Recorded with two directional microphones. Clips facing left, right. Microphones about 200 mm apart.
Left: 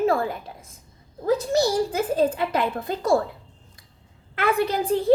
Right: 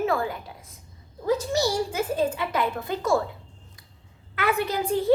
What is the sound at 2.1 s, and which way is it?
A woman's voice, 35° left (ahead or behind).